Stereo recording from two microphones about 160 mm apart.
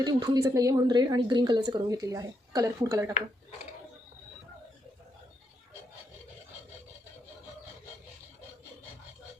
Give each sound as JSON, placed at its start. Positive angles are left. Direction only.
{"t": 0.0, "sound": "a woman's voice", "side_deg": -25}